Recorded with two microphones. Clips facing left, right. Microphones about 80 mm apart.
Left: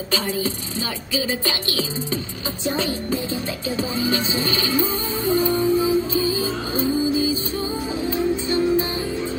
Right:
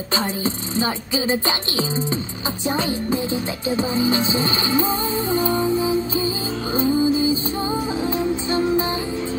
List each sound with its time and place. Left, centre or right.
0.1 s music: right
2.6 s speech: centre
3.6 s music: right
8.5 s music: right